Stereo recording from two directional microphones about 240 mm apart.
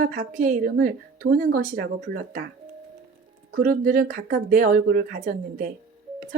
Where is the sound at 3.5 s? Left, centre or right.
Right.